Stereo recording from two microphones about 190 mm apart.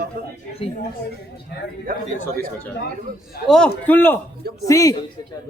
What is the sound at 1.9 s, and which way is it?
Speech, 50° right (ahead or behind).